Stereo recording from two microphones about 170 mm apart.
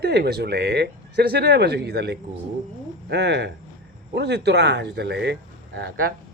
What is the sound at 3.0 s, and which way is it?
Speech, 90° right.